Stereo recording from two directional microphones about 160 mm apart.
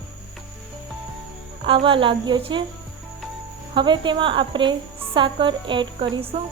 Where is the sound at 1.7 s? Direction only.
35° right (ahead or behind).